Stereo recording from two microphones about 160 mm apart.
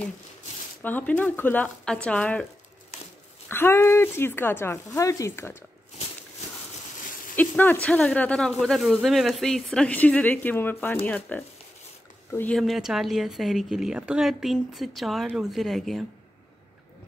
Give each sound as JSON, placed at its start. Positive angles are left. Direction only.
{"t": 0.8, "sound": "speech", "side_deg": 10}
{"t": 3.4, "sound": "speech", "side_deg": 15}
{"t": 7.3, "sound": "speech", "side_deg": 10}
{"t": 12.5, "sound": "a woman's voice", "side_deg": 0}